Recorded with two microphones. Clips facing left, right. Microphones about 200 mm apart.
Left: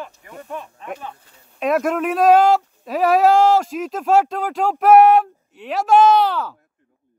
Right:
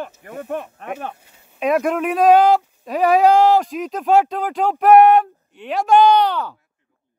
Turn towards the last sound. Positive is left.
turn(degrees=0)  # may be behind; listen again after turning